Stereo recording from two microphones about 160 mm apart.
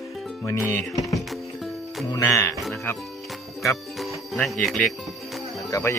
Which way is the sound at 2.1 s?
20° left (ahead or behind).